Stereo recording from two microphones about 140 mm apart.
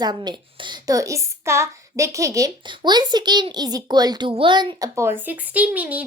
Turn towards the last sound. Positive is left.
turn(degrees=-10)  # may be behind; listen again after turning